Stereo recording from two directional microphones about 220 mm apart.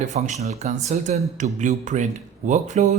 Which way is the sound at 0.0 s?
35° right (ahead or behind).